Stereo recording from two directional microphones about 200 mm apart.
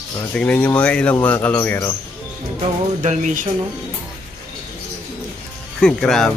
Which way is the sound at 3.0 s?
35° right (ahead or behind).